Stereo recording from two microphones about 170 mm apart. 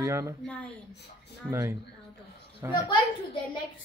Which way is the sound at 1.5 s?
15° right (ahead or behind).